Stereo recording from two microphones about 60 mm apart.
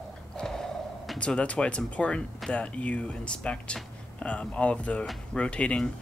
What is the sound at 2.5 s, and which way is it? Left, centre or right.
Speech, centre.